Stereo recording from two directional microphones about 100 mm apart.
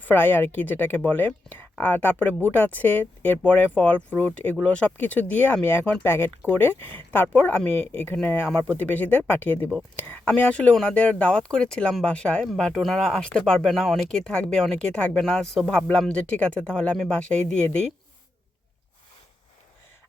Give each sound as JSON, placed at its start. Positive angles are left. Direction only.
{"t": 0.0, "sound": "speech", "side_deg": 20}